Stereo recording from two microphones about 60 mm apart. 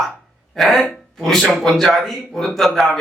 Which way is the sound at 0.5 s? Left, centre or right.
Centre.